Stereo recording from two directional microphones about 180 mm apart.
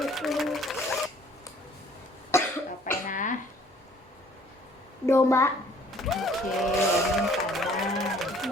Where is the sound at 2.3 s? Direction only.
15° left (ahead or behind).